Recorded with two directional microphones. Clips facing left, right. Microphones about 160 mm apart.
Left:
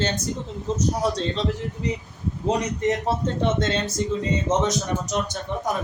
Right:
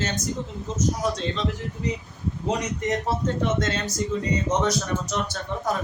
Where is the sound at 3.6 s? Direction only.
30° left (ahead or behind).